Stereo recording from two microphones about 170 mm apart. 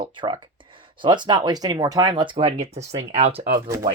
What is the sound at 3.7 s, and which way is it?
Speech, 20° right (ahead or behind).